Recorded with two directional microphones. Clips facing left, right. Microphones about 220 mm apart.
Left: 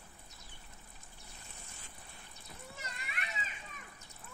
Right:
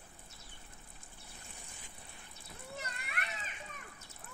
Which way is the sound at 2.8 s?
60° right (ahead or behind).